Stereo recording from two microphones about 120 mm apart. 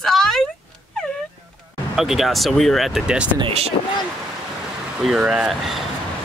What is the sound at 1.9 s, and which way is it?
A woman's voice, 5° right (ahead or behind).